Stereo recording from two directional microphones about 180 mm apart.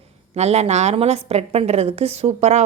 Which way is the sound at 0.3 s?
35° right (ahead or behind).